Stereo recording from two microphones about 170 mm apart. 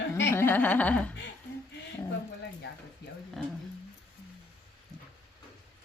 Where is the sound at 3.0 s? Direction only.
80° left.